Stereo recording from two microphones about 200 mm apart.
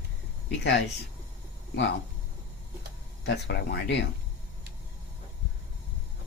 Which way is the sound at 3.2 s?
60° left (ahead or behind).